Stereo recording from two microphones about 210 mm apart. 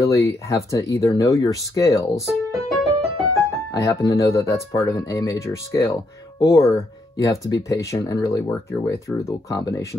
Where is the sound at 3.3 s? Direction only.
15° left (ahead or behind).